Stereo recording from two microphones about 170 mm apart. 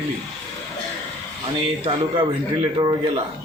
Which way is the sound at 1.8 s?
30° right (ahead or behind).